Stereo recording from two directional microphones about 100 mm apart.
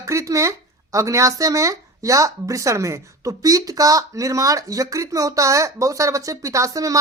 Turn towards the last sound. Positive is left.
turn(degrees=-35)  # may be behind; listen again after turning